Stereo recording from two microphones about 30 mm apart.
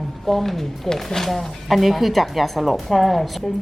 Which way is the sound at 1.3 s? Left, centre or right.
Centre.